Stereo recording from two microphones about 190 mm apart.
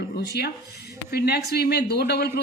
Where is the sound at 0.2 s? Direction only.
60° left (ahead or behind).